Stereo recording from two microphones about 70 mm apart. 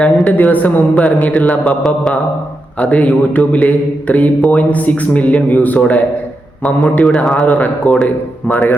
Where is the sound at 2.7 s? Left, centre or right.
Centre.